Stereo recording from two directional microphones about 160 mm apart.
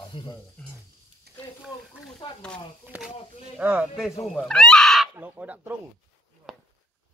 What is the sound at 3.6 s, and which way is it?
Speech, 5° right (ahead or behind).